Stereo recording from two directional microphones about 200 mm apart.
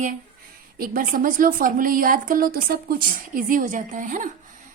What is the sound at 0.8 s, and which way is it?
A woman's voice, 45° right (ahead or behind).